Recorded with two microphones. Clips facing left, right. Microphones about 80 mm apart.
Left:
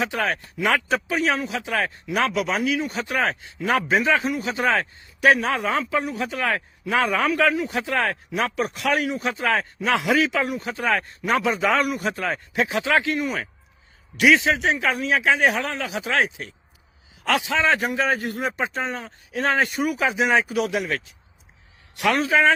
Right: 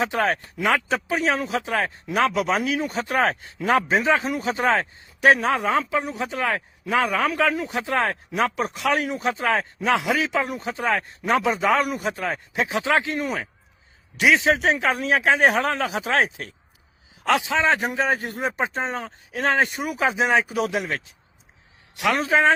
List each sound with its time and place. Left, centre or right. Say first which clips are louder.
0.0 s speech: right 2 dB; right
0.6 s a man's voice: left 1 dB; centre
1.4 s speech: right 2 dB; right
2.1 s a man's voice: right 2 dB; right
5.5 s a man's voice: right 2 dB; centre
9.5 s a man's voice: even; centre
14.2 s a man's voice: left 2 dB; right
14.4 s speech: right 2 dB; right
17.2 s a man's voice: right 1 dB; right
20.1 s speech: right 3 dB; right
20.3 s speech: even; centre
20.6 s a man's voice: left 1 dB; right
21.9 s a man's voice: left 1 dB; centre
22.2 s speech: even; right